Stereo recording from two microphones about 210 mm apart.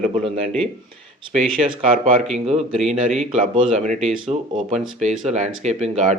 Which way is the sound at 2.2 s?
30° right (ahead or behind).